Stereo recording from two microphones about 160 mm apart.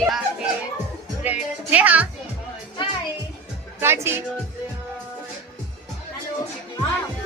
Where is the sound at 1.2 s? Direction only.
10° right (ahead or behind).